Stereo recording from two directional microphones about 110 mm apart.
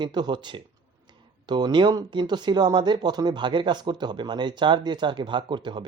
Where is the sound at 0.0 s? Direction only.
40° right (ahead or behind).